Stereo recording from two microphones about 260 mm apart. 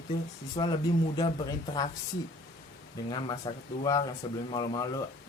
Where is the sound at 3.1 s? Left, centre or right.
Centre.